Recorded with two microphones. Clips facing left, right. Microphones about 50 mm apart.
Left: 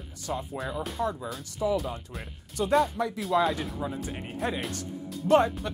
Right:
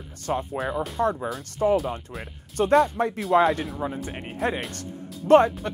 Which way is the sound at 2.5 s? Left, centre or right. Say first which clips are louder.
Right 5 dB; right.